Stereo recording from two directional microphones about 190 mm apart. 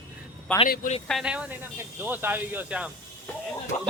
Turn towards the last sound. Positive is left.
turn(degrees=35)  # may be behind; listen again after turning